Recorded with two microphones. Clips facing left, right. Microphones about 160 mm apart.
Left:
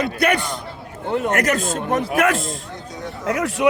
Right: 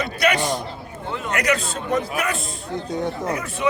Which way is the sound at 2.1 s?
90° left.